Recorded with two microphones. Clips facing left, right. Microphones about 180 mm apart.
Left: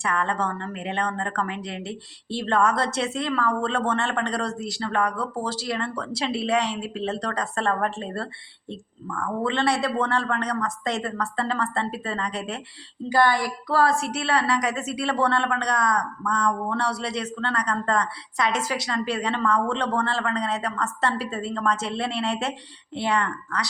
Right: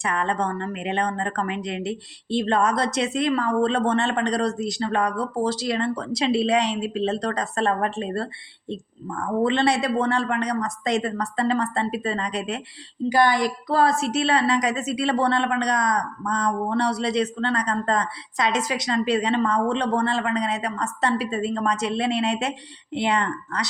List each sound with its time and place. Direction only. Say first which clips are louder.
0.0 s a woman's voice: right 1 dB; 20° right (ahead or behind)